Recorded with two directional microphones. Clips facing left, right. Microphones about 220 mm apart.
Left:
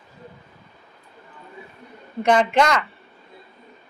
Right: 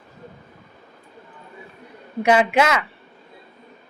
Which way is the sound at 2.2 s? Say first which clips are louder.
Right 1 dB; 10° right (ahead or behind).